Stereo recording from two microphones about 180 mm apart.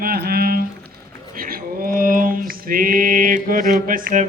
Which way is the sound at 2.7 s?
50° right (ahead or behind).